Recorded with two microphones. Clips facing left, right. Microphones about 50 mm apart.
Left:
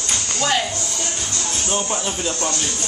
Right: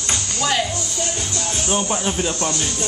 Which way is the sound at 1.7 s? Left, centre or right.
Centre.